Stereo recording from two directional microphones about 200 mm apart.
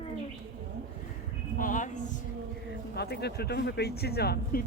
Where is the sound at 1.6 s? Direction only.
40° left (ahead or behind).